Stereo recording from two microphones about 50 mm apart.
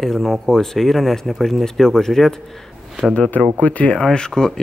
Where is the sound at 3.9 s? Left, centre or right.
Centre.